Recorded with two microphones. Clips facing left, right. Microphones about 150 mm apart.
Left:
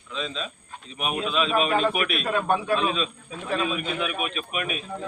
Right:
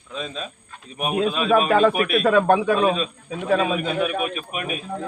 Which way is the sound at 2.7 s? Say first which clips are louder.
Right 5 dB; 40° right (ahead or behind).